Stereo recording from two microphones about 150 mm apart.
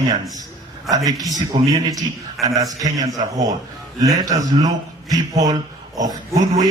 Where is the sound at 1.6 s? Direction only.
25° right (ahead or behind).